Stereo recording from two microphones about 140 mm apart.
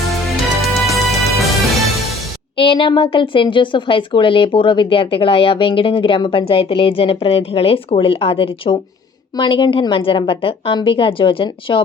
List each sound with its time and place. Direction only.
0.3 s music: centre (ahead or behind)
2.6 s speech: 40° left (ahead or behind)